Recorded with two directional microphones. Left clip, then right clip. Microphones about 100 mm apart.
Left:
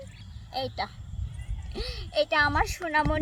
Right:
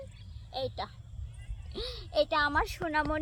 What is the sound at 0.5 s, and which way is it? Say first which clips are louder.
Speech: left 4 dB; 15° right (ahead or behind).